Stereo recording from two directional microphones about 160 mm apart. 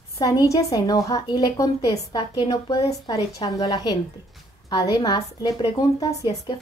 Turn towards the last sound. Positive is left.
turn(degrees=25)  # may be behind; listen again after turning